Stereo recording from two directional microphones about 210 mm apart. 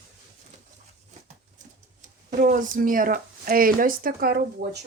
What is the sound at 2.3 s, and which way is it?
Speech, 40° right (ahead or behind).